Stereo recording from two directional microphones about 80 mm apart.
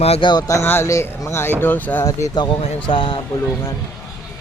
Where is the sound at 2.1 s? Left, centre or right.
Left.